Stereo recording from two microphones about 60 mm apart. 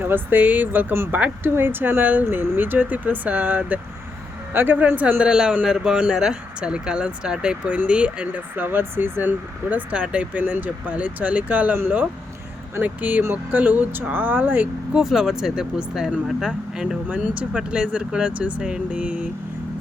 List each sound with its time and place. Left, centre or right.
0.0 s speech: right
5.3 s speech: centre
8.5 s speech: right
14.9 s speech: centre